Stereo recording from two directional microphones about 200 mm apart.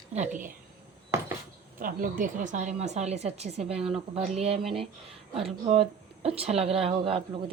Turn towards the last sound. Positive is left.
turn(degrees=-25)  # may be behind; listen again after turning